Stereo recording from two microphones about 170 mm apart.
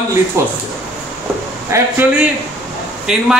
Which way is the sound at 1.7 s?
15° right (ahead or behind).